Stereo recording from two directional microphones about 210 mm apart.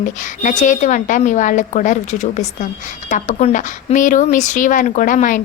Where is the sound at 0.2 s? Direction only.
35° left (ahead or behind).